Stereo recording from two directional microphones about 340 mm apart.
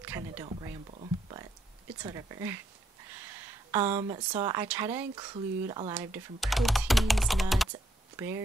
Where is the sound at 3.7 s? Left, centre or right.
Centre.